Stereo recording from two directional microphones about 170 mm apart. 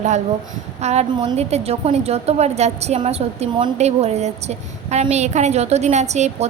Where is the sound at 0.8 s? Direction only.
40° right (ahead or behind).